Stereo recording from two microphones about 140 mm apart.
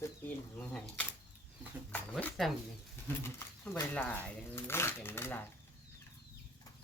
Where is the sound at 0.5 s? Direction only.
10° left (ahead or behind).